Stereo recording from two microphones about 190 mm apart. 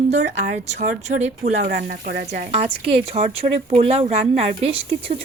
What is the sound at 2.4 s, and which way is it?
Speech, 30° right (ahead or behind).